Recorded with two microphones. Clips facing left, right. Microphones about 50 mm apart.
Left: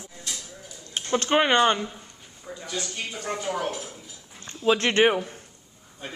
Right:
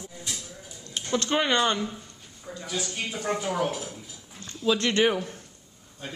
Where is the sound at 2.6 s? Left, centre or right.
Centre.